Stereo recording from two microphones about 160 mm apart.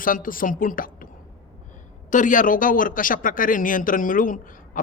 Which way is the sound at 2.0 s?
55° left (ahead or behind).